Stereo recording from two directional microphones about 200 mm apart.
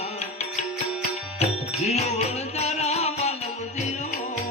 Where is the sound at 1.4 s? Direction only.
35° left (ahead or behind).